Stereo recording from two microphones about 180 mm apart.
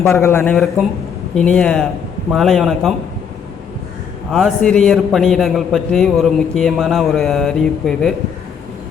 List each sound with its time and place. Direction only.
0.0 s a man's voice: 15° left (ahead or behind)
4.3 s a man's voice: centre (ahead or behind)